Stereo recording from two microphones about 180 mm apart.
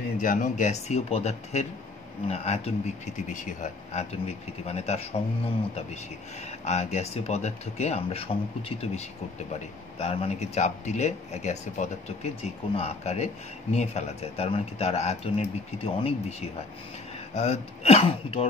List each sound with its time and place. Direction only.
0.2 s speech: 45° left (ahead or behind)
6.6 s speech: 40° left (ahead or behind)